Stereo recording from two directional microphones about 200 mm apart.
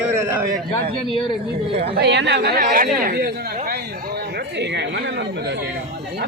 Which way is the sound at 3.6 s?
50° right (ahead or behind).